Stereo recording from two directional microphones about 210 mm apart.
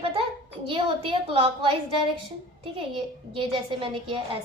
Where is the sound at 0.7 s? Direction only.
25° right (ahead or behind).